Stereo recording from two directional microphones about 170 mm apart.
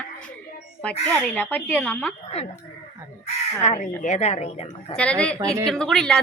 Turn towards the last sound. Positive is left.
turn(degrees=5)  # may be behind; listen again after turning